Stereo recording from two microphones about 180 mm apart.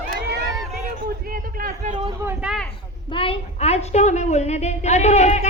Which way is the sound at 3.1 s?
30° left (ahead or behind).